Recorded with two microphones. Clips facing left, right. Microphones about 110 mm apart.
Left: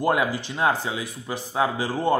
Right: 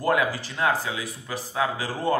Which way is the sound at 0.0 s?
20° left (ahead or behind).